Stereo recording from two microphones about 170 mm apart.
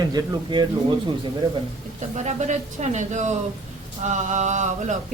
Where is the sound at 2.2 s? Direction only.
45° right (ahead or behind).